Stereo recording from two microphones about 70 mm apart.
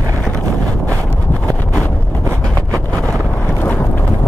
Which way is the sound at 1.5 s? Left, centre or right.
Centre.